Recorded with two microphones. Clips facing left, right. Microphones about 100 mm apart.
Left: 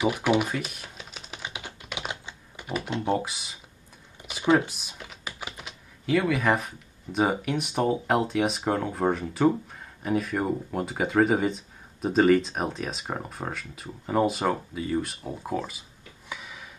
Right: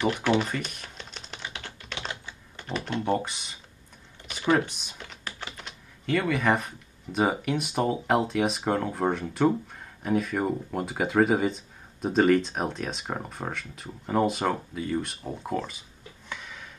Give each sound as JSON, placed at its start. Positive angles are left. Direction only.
{"t": 0.0, "sound": "speech", "side_deg": 10}
{"t": 1.4, "sound": "typing", "side_deg": 15}
{"t": 2.9, "sound": "speech", "side_deg": 20}
{"t": 3.2, "sound": "speech", "side_deg": 5}
{"t": 4.2, "sound": "computer keyboard", "side_deg": 10}
{"t": 4.6, "sound": "speech", "side_deg": 5}
{"t": 16.3, "sound": "a sound", "side_deg": 5}